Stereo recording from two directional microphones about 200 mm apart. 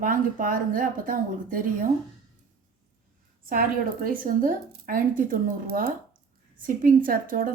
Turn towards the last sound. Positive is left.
turn(degrees=-45)  # may be behind; listen again after turning